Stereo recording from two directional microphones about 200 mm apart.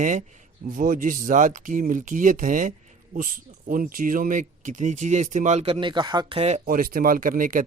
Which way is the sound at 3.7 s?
45° right (ahead or behind).